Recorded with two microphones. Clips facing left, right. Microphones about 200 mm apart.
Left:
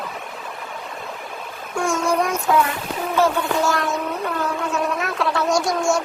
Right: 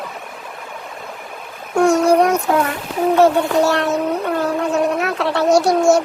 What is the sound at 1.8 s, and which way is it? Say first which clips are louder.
Child singing: right 8 dB; 65° right (ahead or behind).